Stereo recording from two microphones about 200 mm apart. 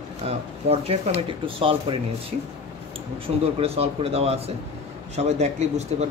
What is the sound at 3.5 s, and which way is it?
Speech, 30° right (ahead or behind).